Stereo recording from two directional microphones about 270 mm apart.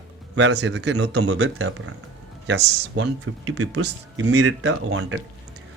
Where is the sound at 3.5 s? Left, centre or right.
Right.